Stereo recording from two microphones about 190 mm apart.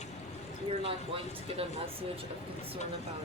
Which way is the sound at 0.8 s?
30° right (ahead or behind).